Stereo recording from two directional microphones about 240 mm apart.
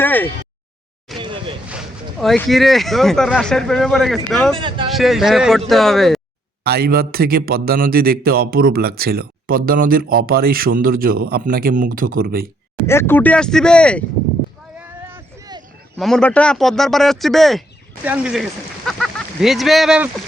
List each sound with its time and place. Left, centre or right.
0.0 s a sound: centre
1.2 s vehicle: centre
1.6 s speech: centre
4.5 s speech: right
4.9 s speech: centre
6.7 s a man's voice: right
12.9 s speech: centre
14.8 s a sound: centre
16.0 s speech: centre